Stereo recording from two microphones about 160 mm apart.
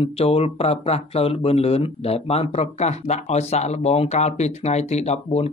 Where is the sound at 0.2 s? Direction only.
40° left (ahead or behind).